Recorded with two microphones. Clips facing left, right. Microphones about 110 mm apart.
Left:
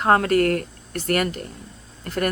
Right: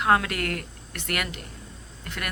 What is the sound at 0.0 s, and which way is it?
Speech, 40° left (ahead or behind).